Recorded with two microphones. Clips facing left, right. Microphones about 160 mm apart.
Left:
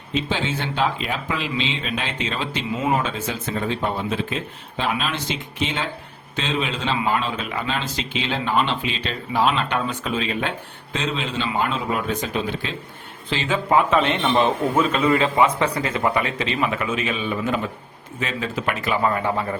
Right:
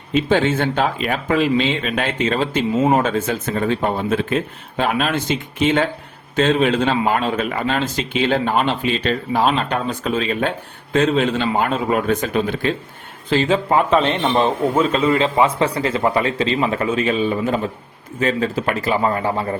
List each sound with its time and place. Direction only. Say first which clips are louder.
0.1 s speech: right 8 dB; 55° right (ahead or behind)
13.3 s a man's voice: right 4 dB; 40° right (ahead or behind)